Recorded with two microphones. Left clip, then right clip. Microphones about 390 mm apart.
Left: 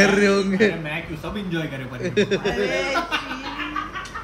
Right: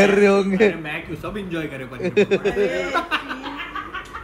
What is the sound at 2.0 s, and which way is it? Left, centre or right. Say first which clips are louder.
Speech: right 3 dB; centre.